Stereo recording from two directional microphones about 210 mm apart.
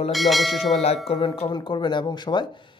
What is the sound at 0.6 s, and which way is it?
Speech, 30° left (ahead or behind).